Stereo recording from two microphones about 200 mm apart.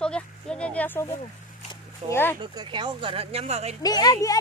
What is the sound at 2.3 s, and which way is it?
Speech, 25° right (ahead or behind).